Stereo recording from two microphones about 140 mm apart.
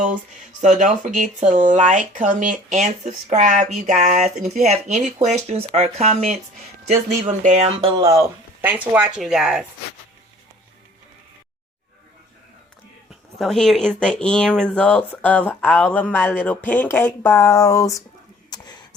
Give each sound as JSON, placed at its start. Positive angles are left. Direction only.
{"t": 0.0, "sound": "speech", "side_deg": -60}
{"t": 7.9, "sound": "speech", "side_deg": -25}
{"t": 8.6, "sound": "speech", "side_deg": -10}
{"t": 13.1, "sound": "speech", "side_deg": 0}